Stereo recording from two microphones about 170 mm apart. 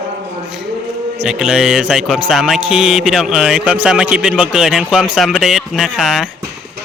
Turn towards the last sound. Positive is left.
turn(degrees=0)  # may be behind; listen again after turning